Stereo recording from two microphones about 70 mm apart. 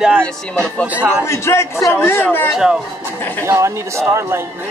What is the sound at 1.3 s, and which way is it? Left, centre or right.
Speech, left.